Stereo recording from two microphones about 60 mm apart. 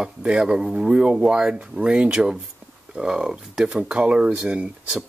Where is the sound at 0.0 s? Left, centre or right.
Centre.